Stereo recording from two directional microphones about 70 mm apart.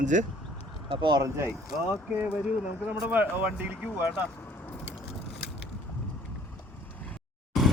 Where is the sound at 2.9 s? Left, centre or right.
Right.